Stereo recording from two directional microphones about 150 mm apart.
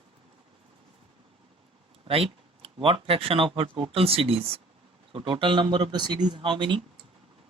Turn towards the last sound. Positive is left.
turn(degrees=-35)  # may be behind; listen again after turning